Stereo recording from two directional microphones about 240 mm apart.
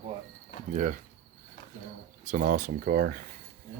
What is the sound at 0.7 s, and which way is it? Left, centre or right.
Speech, right.